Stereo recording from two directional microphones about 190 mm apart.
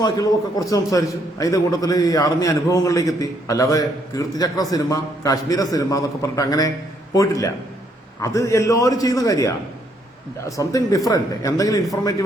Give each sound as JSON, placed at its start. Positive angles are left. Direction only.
{"t": 0.0, "sound": "a man's voice", "side_deg": 20}
{"t": 10.6, "sound": "a man's voice", "side_deg": 15}